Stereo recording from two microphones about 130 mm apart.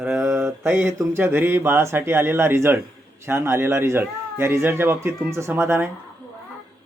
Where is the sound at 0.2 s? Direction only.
20° right (ahead or behind).